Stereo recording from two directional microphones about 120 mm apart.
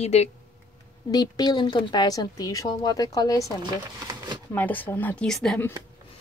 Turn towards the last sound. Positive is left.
turn(degrees=5)  # may be behind; listen again after turning